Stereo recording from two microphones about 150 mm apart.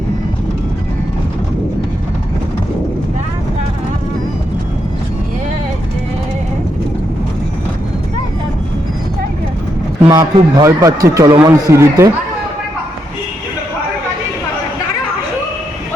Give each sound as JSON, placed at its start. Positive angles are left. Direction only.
{"t": 10.0, "sound": "a man's voice", "side_deg": -25}